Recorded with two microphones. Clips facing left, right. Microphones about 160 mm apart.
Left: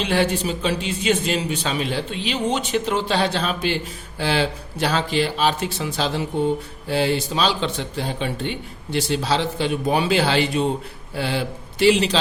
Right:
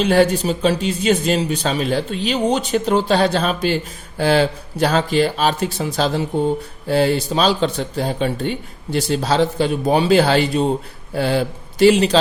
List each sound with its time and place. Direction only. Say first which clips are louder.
0.0 s speech: right 6 dB; 40° right (ahead or behind)